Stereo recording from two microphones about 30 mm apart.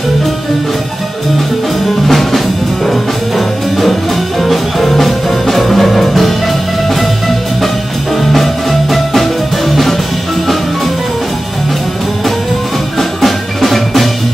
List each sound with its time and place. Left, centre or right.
2.0 s music: centre
8.2 s music: centre
13.2 s music: centre